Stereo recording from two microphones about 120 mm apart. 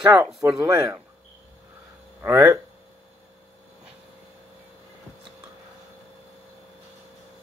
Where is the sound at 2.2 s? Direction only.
25° right (ahead or behind).